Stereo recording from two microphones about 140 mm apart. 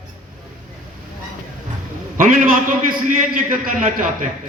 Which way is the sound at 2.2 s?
80° right.